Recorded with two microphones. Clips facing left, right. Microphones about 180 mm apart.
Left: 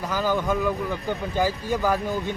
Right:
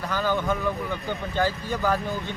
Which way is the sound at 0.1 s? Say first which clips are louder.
Left 1 dB; 5° left (ahead or behind).